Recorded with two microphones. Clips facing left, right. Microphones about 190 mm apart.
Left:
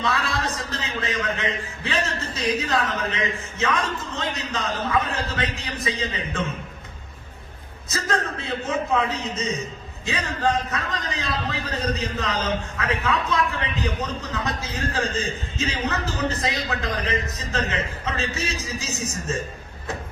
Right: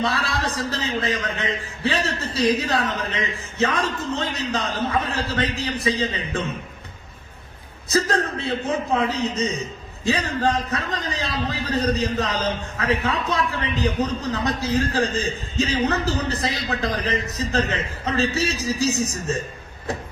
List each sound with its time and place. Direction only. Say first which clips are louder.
0.0 s a man's voice: right 1 dB; 35° right (ahead or behind)
7.9 s a man's voice: right 5 dB; 35° right (ahead or behind)